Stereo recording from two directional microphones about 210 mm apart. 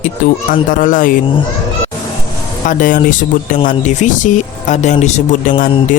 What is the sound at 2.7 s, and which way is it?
Speech, 40° left (ahead or behind).